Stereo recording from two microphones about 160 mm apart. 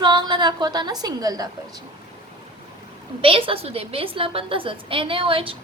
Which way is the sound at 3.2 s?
35° right (ahead or behind).